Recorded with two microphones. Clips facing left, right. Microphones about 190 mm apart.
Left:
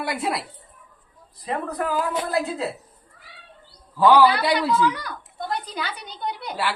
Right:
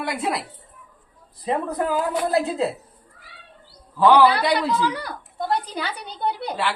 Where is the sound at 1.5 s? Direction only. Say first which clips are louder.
Right 3 dB; 25° right (ahead or behind).